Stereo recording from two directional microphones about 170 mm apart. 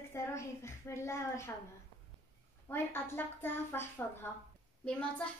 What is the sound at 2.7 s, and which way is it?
A woman's voice, 15° left (ahead or behind).